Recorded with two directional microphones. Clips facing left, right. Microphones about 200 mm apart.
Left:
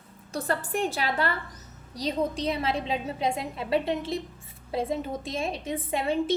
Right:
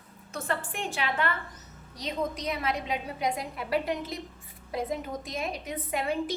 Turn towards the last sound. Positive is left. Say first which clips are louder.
# left 4 dB
turn(degrees=25)  # may be behind; listen again after turning